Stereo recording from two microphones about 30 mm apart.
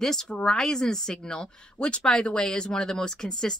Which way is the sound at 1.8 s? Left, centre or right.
Left.